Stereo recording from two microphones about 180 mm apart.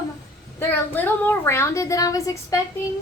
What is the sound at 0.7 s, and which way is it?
Speech, 10° left (ahead or behind).